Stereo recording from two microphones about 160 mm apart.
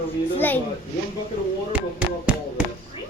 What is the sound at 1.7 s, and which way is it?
Speech, 5° right (ahead or behind).